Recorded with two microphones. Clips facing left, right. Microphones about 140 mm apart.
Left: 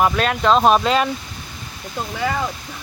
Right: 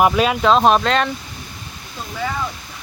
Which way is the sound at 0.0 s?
5° right (ahead or behind).